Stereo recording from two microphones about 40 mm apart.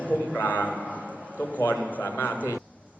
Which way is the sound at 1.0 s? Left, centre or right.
Right.